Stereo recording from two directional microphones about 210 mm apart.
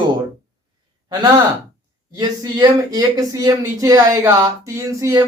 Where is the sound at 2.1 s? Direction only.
20° right (ahead or behind).